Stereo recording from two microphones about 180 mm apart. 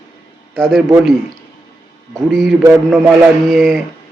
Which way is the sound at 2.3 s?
5° left (ahead or behind).